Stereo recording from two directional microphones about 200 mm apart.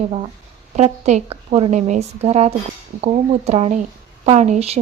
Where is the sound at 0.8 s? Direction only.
35° right (ahead or behind).